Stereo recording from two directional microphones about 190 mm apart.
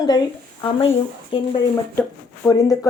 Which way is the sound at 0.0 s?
20° left (ahead or behind).